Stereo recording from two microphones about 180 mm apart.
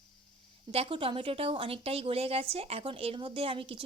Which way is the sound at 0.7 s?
30° right (ahead or behind).